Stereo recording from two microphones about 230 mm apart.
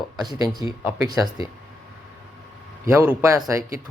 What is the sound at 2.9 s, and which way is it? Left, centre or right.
Speech, centre.